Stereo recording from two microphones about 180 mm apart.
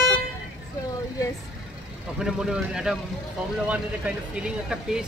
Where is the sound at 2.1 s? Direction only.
5° right (ahead or behind).